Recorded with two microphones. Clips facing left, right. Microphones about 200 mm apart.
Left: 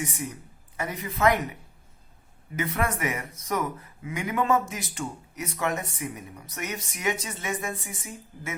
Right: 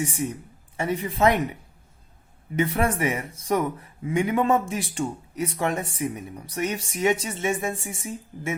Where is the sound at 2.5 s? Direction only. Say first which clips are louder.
Right 5 dB; 30° right (ahead or behind).